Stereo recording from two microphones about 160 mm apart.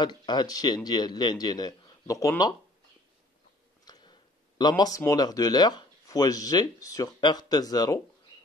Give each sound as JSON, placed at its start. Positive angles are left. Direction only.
{"t": 0.0, "sound": "a man's voice", "side_deg": 25}
{"t": 3.8, "sound": "speech", "side_deg": 25}